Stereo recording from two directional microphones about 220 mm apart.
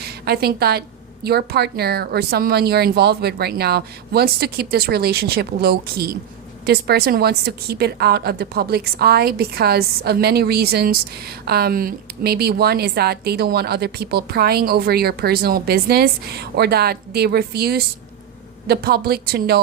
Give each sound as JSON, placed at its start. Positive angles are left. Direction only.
{"t": 0.0, "sound": "a woman's voice", "side_deg": -45}